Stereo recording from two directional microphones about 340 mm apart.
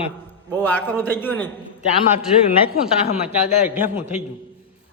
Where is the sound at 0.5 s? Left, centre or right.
Centre.